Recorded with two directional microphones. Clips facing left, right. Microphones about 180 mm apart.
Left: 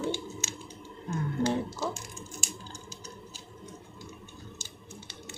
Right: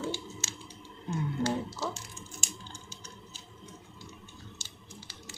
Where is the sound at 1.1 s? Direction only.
20° left (ahead or behind).